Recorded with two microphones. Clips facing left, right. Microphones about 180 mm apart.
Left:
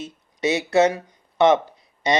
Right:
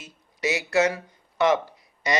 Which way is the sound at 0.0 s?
25° left (ahead or behind).